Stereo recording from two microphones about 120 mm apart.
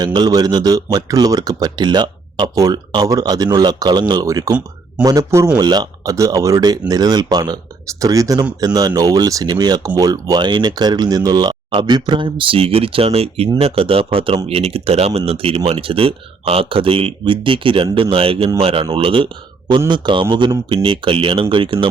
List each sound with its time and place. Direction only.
0.0 s speech: 35° right (ahead or behind)